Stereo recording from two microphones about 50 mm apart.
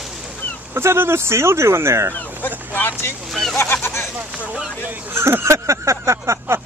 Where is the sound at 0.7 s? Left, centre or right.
Right.